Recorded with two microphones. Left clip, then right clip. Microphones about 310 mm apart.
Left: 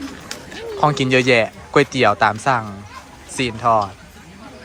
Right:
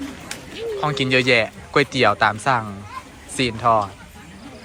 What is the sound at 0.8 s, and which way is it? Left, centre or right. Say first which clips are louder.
Speech: left 4 dB; centre.